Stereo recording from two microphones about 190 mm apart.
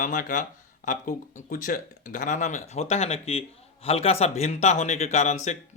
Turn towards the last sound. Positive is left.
turn(degrees=35)  # may be behind; listen again after turning